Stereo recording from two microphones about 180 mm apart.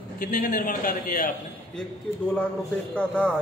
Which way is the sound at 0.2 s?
50° left (ahead or behind).